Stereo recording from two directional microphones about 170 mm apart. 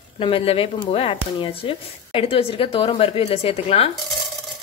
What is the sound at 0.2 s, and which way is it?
Speech, 30° left (ahead or behind).